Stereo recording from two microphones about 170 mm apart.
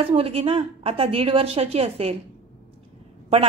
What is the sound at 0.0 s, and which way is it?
A woman's voice, 35° right (ahead or behind).